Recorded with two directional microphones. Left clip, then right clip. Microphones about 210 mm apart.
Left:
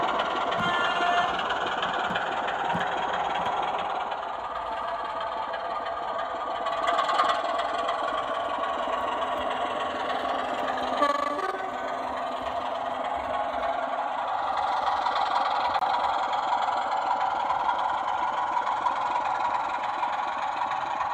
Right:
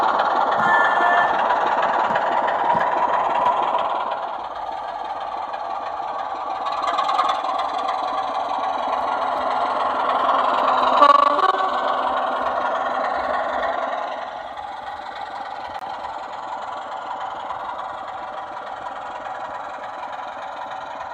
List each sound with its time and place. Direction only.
0.2 s train: 10° right (ahead or behind)
0.6 s a sound: 50° right (ahead or behind)
0.9 s vehicle: 20° right (ahead or behind)
10.8 s vehicle: 45° right (ahead or behind)